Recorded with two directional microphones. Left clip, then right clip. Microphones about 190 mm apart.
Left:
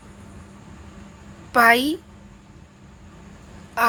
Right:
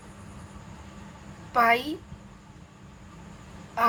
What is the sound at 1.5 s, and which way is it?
Speech, 45° left (ahead or behind).